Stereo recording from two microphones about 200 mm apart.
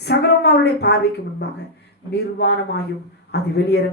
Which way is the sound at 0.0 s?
55° left (ahead or behind).